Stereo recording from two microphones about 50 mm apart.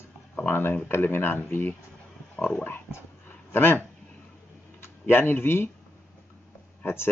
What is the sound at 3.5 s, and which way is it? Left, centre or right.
Speech, left.